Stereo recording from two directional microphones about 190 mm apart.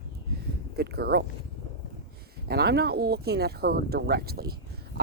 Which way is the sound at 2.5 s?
60° right (ahead or behind).